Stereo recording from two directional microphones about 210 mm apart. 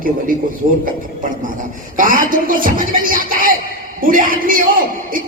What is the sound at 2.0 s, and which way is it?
Speech, 40° right (ahead or behind).